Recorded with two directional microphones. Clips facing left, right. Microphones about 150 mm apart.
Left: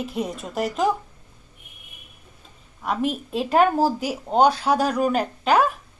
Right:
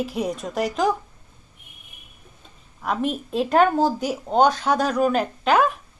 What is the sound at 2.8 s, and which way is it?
A woman's voice, centre (ahead or behind).